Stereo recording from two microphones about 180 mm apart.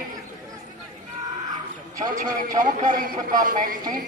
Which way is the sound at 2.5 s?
50° right (ahead or behind).